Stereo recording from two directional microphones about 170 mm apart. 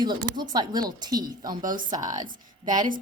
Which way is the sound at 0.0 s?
25° right (ahead or behind).